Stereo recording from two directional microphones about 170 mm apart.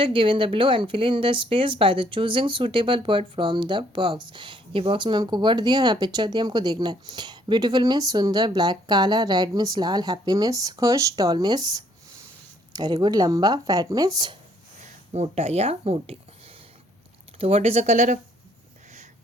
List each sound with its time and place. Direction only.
0.0 s speech: 30° right (ahead or behind)
14.8 s speech: 40° right (ahead or behind)
17.4 s speech: 35° right (ahead or behind)